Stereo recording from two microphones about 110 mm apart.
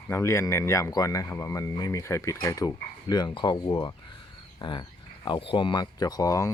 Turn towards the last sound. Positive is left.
turn(degrees=30)  # may be behind; listen again after turning